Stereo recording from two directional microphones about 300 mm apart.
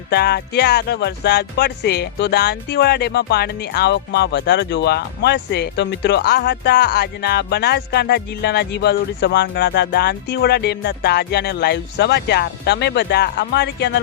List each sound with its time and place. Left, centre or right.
0.1 s speech: left